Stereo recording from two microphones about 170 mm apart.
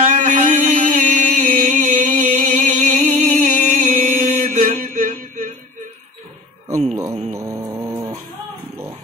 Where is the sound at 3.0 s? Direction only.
45° right (ahead or behind).